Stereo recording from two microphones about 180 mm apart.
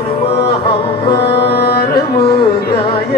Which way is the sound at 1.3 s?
60° left (ahead or behind).